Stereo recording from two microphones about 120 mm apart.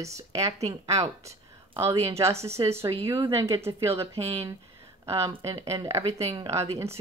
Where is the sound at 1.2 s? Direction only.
25° right (ahead or behind).